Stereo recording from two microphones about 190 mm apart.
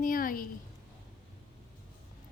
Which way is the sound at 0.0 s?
45° left (ahead or behind).